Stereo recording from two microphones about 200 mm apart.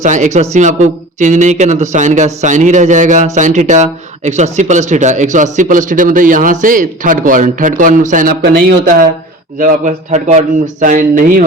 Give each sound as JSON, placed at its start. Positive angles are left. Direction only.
{"t": 0.0, "sound": "a man's voice", "side_deg": -35}